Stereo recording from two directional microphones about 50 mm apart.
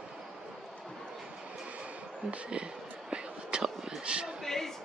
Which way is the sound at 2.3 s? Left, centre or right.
Right.